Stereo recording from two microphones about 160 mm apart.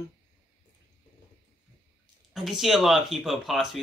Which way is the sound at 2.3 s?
Centre (ahead or behind).